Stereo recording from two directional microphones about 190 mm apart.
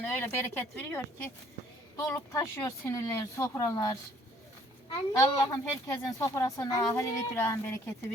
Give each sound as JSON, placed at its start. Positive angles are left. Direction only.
{"t": 0.0, "sound": "speech", "side_deg": 10}
{"t": 5.1, "sound": "speech", "side_deg": 20}